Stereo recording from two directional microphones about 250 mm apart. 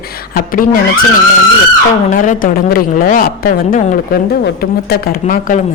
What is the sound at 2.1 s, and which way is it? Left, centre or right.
A man's voice, left.